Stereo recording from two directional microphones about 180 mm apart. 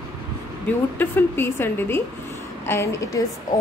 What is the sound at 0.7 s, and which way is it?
A woman's voice, 10° left (ahead or behind).